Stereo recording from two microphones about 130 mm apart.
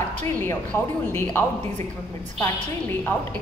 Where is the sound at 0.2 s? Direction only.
15° left (ahead or behind).